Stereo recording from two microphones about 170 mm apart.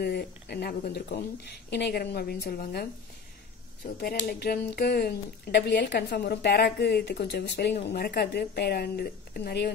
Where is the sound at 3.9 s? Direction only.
65° left (ahead or behind).